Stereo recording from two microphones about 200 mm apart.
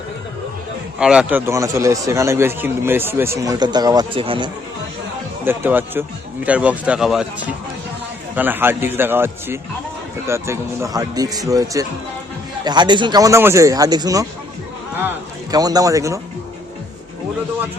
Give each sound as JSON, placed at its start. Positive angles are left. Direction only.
{"t": 0.9, "sound": "speech", "side_deg": -5}
{"t": 5.5, "sound": "speech", "side_deg": -10}
{"t": 8.4, "sound": "speech", "side_deg": -10}
{"t": 15.5, "sound": "speech", "side_deg": -20}